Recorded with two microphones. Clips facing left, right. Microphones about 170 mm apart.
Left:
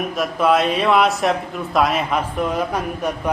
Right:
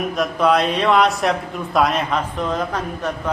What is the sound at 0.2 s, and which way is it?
A man's voice, 5° left (ahead or behind).